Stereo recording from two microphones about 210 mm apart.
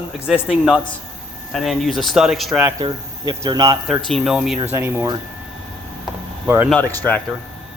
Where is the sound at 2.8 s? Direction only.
20° right (ahead or behind).